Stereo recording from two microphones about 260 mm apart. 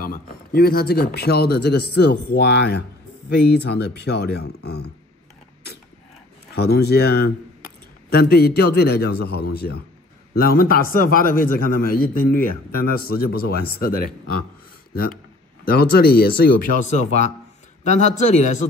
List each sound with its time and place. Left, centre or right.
0.0 s a man's voice: left
6.5 s a man's voice: left
15.6 s a man's voice: left